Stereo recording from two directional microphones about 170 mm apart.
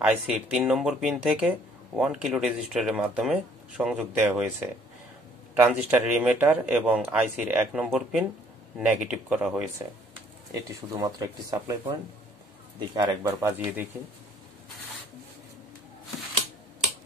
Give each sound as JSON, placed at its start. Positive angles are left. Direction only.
{"t": 0.0, "sound": "speech", "side_deg": -10}
{"t": 10.5, "sound": "speech", "side_deg": -20}